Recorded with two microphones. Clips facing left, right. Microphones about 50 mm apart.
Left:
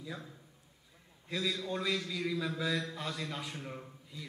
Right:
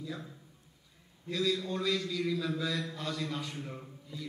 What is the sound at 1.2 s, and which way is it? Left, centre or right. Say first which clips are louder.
A man's voice: right 4 dB; centre.